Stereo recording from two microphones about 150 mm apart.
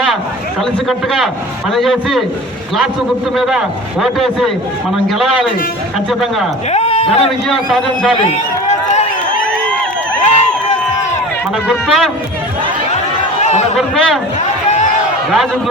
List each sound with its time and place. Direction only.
0.9 s a man's voice: centre (ahead or behind)
4.0 s a man's voice: centre (ahead or behind)
6.7 s a sound: 45° left (ahead or behind)
7.4 s a man's voice: centre (ahead or behind)
10.2 s crowd: 50° left (ahead or behind)
11.7 s a man's voice: centre (ahead or behind)
13.4 s a sound: 50° left (ahead or behind)
13.7 s a man's voice: centre (ahead or behind)